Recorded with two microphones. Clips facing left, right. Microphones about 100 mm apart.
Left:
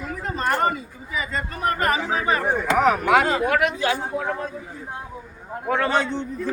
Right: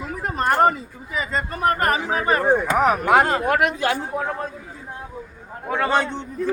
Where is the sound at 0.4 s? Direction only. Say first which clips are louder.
Right 4 dB; 40° right (ahead or behind).